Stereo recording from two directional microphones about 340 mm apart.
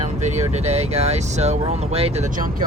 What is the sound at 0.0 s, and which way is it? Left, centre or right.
Speech, centre.